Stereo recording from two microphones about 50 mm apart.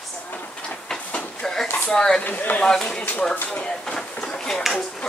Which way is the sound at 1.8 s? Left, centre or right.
Centre.